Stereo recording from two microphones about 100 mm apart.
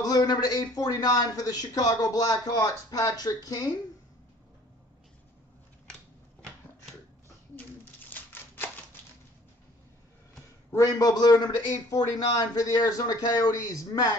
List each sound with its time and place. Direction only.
0.0 s a man's voice: 40° left (ahead or behind)
8.1 s a sound: 20° left (ahead or behind)
10.7 s a man's voice: 35° left (ahead or behind)